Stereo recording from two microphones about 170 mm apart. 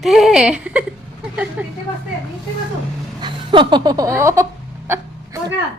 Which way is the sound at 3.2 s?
30° right (ahead or behind).